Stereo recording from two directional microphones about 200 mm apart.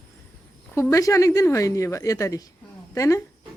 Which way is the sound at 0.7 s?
15° left (ahead or behind).